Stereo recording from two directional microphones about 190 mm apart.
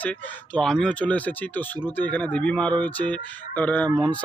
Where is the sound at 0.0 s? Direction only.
5° left (ahead or behind).